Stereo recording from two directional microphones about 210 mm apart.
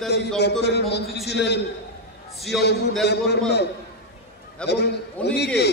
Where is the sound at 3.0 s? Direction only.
55° left (ahead or behind).